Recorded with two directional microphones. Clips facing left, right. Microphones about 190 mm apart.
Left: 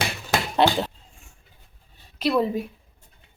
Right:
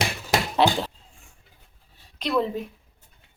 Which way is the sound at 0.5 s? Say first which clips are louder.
Left 2 dB; centre (ahead or behind).